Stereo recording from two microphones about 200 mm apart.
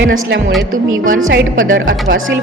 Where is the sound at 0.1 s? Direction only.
50° right (ahead or behind).